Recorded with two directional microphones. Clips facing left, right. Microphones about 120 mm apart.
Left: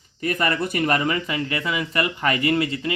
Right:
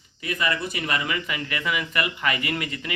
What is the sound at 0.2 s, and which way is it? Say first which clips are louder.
Speech: left 4 dB; 50° left (ahead or behind).